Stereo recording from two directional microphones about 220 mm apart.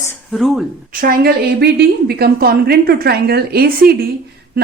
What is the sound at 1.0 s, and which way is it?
A woman's voice, 45° right (ahead or behind).